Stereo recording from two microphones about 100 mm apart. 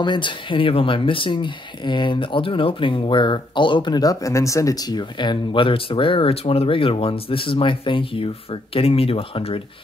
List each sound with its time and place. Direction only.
0.0 s speech: 50° left (ahead or behind)
8.7 s speech: 75° left (ahead or behind)